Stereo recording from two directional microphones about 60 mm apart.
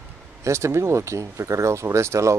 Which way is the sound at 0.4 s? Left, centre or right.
Right.